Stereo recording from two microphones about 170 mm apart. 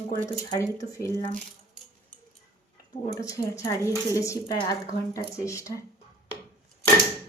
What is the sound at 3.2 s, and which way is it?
Speech, 20° left (ahead or behind).